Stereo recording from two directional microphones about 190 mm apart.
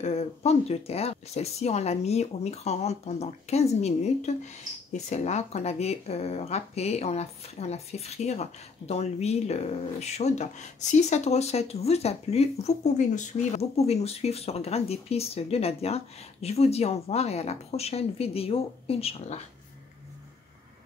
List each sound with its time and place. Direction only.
0.0 s speech: 35° left (ahead or behind)